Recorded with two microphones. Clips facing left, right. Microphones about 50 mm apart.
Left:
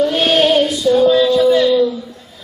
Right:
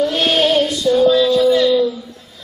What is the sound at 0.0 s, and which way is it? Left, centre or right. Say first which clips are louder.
Child singing: left 2 dB; centre.